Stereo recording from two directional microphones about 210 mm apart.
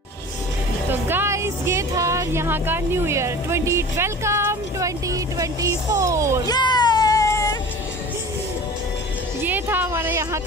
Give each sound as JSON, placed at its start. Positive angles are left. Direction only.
{"t": 1.0, "sound": "speech", "side_deg": -10}
{"t": 6.4, "sound": "a sound", "side_deg": 20}
{"t": 9.4, "sound": "speech", "side_deg": -10}